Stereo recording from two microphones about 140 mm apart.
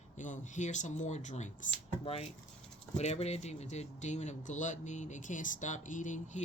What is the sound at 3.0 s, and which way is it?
Speech, 50° left (ahead or behind).